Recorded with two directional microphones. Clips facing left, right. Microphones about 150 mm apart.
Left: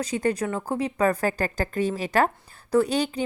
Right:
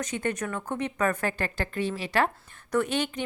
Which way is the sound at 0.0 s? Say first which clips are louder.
Left 5 dB; 35° left (ahead or behind).